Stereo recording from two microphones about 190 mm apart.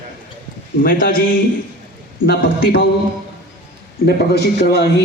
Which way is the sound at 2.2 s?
55° left (ahead or behind).